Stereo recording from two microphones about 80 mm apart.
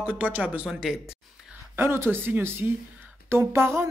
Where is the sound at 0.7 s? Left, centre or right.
Centre.